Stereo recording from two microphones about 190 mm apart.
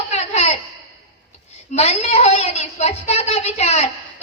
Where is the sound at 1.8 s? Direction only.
35° left (ahead or behind).